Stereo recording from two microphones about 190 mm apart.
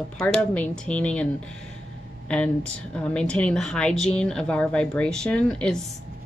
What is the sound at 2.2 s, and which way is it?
Speech, 5° left (ahead or behind).